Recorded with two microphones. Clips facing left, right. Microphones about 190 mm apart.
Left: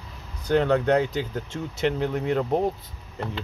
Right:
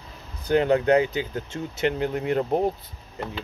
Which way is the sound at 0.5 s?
5° right (ahead or behind).